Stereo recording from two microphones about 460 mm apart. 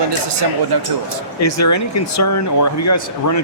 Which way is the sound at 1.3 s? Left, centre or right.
Left.